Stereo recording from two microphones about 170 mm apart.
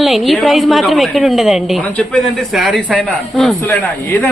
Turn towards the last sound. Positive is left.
turn(degrees=15)  # may be behind; listen again after turning